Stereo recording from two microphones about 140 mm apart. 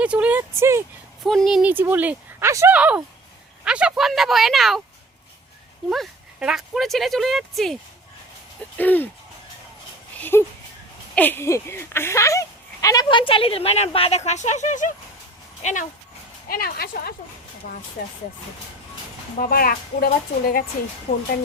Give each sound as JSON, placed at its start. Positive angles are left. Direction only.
{"t": 0.0, "sound": "speech", "side_deg": -10}
{"t": 1.2, "sound": "speech", "side_deg": 0}
{"t": 1.7, "sound": "speech", "side_deg": -15}
{"t": 5.9, "sound": "speech", "side_deg": -5}
{"t": 8.8, "sound": "speech", "side_deg": 10}
{"t": 10.2, "sound": "speech", "side_deg": 15}
{"t": 16.5, "sound": "a woman's voice", "side_deg": 90}
{"t": 19.4, "sound": "a woman's voice", "side_deg": 90}
{"t": 21.1, "sound": "speech", "side_deg": 55}